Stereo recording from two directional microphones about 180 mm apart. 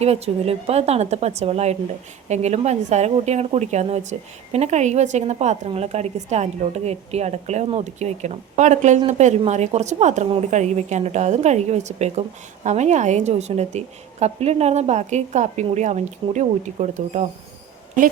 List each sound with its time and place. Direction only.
0.0 s a woman's voice: 35° right (ahead or behind)